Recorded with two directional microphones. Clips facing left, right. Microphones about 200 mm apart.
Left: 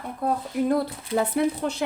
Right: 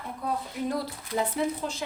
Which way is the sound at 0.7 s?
65° left (ahead or behind).